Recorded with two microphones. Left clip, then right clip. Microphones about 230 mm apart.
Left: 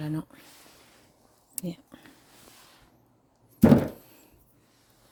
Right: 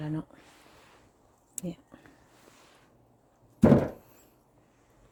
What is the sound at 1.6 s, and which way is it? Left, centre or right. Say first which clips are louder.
Speech: left 2 dB; left.